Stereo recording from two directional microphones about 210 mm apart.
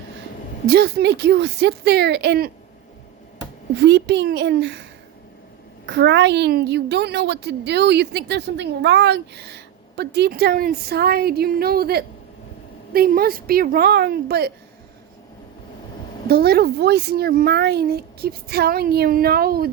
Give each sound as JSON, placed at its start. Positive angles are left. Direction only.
{"t": 0.7, "sound": "a woman's voice", "side_deg": -50}
{"t": 3.8, "sound": "a woman's voice", "side_deg": -55}
{"t": 16.3, "sound": "a woman's voice", "side_deg": -50}